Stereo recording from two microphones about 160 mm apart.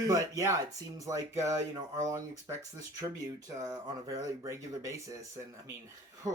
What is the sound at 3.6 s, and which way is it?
Speech, 20° right (ahead or behind).